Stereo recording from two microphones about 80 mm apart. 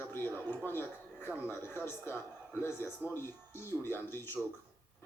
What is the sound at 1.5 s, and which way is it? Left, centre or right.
Speech, left.